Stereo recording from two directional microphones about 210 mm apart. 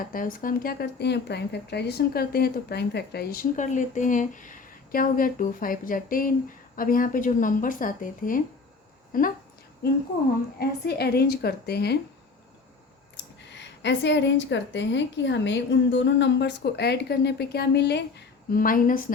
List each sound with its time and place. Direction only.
0.0 s speech: 40° left (ahead or behind)
3.5 s a woman's voice: 35° left (ahead or behind)
10.6 s speech: 50° left (ahead or behind)
13.1 s speech: 55° left (ahead or behind)
18.5 s a woman's voice: 40° left (ahead or behind)